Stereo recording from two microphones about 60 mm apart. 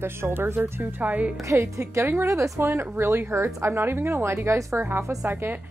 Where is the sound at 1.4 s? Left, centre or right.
Right.